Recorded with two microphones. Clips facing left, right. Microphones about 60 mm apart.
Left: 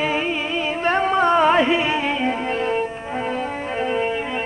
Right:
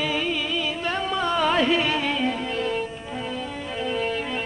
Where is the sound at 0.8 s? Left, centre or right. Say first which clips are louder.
Left 11 dB; left.